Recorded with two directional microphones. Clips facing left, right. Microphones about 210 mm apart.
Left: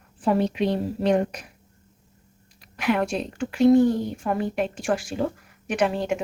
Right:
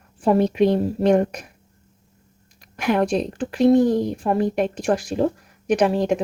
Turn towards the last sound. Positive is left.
turn(degrees=-40)  # may be behind; listen again after turning